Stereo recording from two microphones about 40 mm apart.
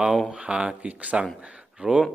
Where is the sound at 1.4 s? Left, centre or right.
Right.